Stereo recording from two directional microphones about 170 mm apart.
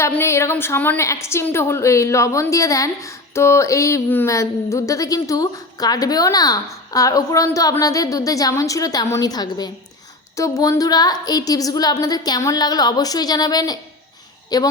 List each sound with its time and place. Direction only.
0.0 s a woman's voice: 15° left (ahead or behind)